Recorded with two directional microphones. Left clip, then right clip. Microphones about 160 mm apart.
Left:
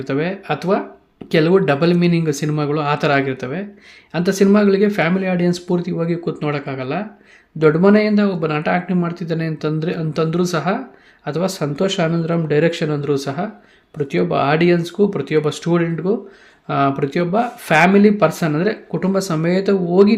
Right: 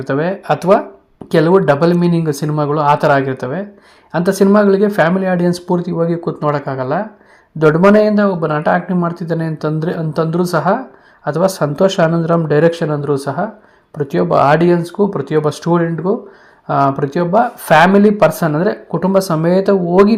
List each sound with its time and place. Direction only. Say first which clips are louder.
0.0 s speech: right 4 dB; 5° right (ahead or behind)
1.3 s speech: right 4 dB; centre (ahead or behind)
7.7 s a man's voice: right 5 dB; 15° left (ahead or behind)
8.0 s speech: right 5 dB; 5° right (ahead or behind)